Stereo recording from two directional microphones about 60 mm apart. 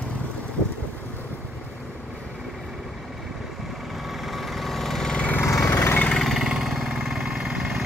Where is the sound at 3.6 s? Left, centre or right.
Centre.